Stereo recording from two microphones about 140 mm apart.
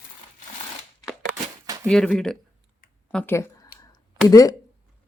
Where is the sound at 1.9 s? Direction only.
5° left (ahead or behind).